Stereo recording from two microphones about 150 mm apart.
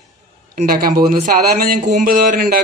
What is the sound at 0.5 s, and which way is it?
A man's voice, 80° right.